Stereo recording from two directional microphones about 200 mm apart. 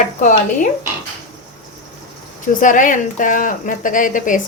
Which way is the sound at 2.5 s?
40° left (ahead or behind).